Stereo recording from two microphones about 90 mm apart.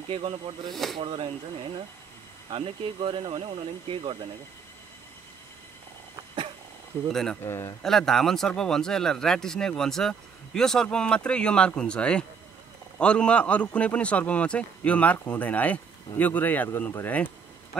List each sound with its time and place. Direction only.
0.1 s speech: 85° right
0.7 s speech: centre (ahead or behind)
0.9 s speech: 65° right (ahead or behind)
2.5 s speech: 90° right; by 4.2 s 75° right (ahead or behind)
7.1 s speech: 5° left (ahead or behind)
7.4 s speech: 30° left (ahead or behind)
7.8 s speech: 5° left (ahead or behind); by 17.3 s 20° left (ahead or behind)